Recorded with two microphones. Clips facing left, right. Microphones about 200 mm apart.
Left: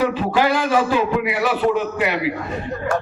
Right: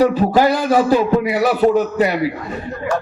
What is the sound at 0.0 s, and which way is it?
A man's voice, 40° right (ahead or behind).